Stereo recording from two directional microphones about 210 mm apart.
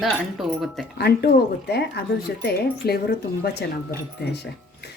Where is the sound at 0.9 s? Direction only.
50° left (ahead or behind).